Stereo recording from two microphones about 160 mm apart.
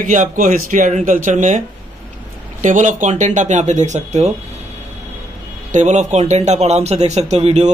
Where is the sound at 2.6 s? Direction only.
50° right (ahead or behind).